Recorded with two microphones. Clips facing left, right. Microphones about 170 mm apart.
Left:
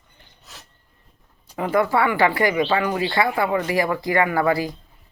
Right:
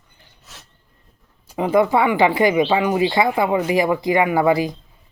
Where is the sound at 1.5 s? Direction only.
20° right (ahead or behind).